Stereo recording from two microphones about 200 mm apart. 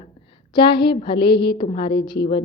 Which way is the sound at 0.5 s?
25° left (ahead or behind).